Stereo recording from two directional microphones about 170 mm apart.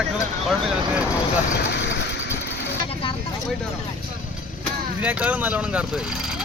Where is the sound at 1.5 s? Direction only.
90° left.